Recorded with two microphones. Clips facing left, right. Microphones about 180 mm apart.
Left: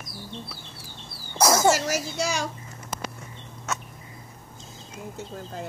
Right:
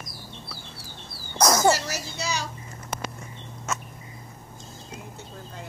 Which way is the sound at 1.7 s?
45° left (ahead or behind).